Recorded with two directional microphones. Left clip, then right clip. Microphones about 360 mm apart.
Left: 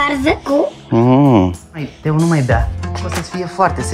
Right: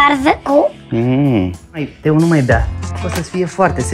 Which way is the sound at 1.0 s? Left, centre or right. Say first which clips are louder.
Left 4 dB; centre.